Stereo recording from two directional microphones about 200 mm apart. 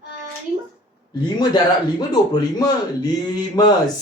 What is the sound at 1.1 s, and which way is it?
A man's voice, 20° left (ahead or behind).